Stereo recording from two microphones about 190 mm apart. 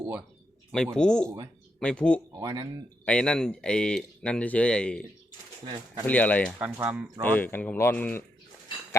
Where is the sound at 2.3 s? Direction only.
20° right (ahead or behind).